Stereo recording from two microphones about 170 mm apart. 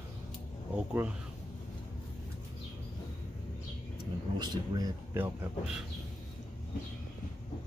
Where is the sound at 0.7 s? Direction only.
5° right (ahead or behind).